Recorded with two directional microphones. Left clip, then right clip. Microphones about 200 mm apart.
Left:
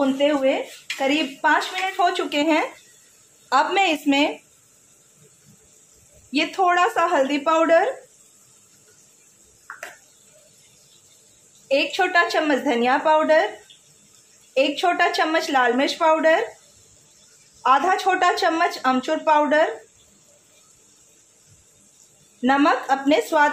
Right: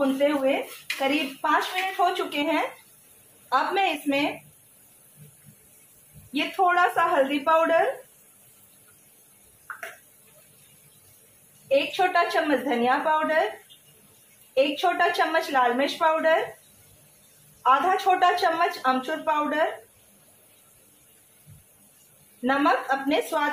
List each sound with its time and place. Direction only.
1.4 s a woman's voice: 50° left (ahead or behind)
6.3 s speech: 50° left (ahead or behind)
11.7 s speech: 50° left (ahead or behind)
14.5 s speech: 55° left (ahead or behind)
17.6 s speech: 55° left (ahead or behind)
22.4 s speech: 55° left (ahead or behind)